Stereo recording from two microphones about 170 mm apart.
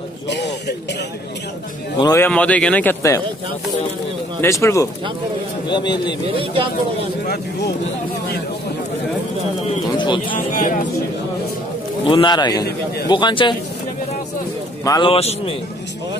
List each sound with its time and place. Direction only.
0.3 s music: 90° left
2.1 s speech: 10° left (ahead or behind)
4.4 s a man's voice: 15° left (ahead or behind)
6.3 s speech: 30° right (ahead or behind)
9.9 s a man's voice: 30° left (ahead or behind)
10.5 s speech: 50° left (ahead or behind)
12.1 s a man's voice: 25° left (ahead or behind)
14.9 s a man's voice: 30° left (ahead or behind)